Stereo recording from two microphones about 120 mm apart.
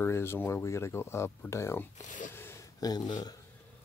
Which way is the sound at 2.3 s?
20° left (ahead or behind).